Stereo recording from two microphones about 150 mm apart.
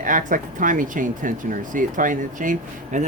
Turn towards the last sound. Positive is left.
turn(degrees=-60)  # may be behind; listen again after turning